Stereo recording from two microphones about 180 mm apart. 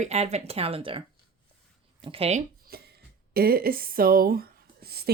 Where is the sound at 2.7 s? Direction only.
60° right (ahead or behind).